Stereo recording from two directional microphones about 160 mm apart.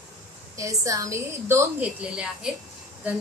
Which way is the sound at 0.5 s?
20° right (ahead or behind).